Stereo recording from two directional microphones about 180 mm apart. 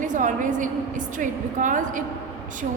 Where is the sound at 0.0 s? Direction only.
45° right (ahead or behind).